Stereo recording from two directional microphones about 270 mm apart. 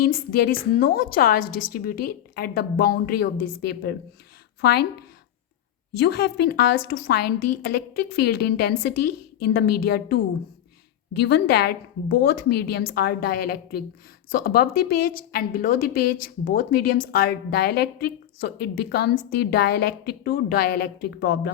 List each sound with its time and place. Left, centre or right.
0.0 s a woman's voice: left